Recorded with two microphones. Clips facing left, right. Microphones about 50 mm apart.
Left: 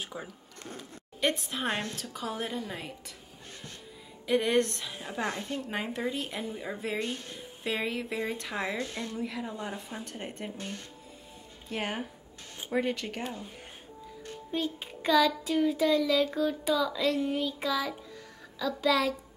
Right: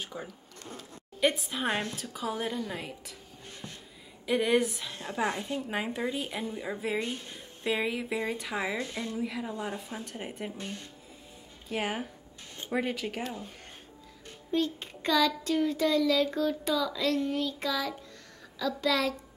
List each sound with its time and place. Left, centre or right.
0.0 s a child's voice: centre
4.3 s a child's voice: centre
5.2 s a woman's voice: centre
5.7 s a child's voice: centre
8.7 s a woman's voice: right
9.1 s a child's voice: centre
11.7 s a child's voice: centre
14.5 s a child's voice: centre